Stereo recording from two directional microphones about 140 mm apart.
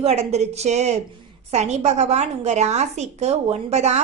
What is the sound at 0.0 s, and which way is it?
A woman's voice, 50° right (ahead or behind).